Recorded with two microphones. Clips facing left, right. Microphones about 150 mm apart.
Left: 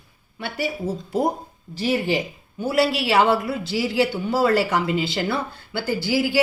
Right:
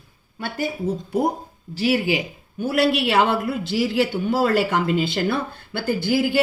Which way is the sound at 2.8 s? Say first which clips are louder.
Even; 55° right (ahead or behind).